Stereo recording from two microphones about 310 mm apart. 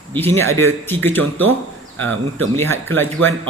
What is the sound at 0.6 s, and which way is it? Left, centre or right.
Speech, centre.